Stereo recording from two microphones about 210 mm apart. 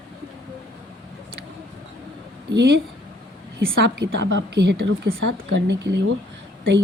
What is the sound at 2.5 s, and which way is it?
A woman's voice, 55° right (ahead or behind).